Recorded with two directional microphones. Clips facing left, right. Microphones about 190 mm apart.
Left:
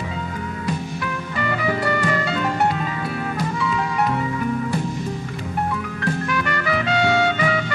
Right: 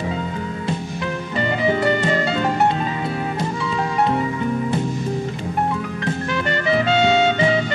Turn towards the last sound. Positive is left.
turn(degrees=-25)  # may be behind; listen again after turning